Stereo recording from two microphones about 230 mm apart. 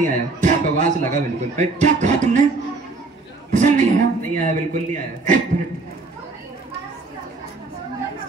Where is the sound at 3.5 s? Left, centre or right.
Right.